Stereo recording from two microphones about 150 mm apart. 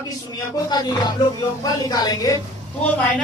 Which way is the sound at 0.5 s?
25° left (ahead or behind).